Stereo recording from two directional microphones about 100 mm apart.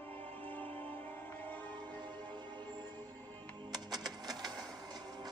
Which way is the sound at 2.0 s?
50° right (ahead or behind).